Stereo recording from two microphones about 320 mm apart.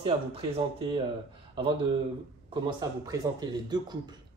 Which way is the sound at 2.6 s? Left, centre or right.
Centre.